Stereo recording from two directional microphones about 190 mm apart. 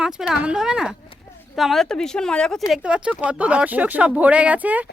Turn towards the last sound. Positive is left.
turn(degrees=-10)  # may be behind; listen again after turning